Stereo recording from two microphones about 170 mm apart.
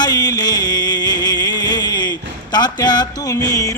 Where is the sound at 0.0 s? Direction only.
25° left (ahead or behind).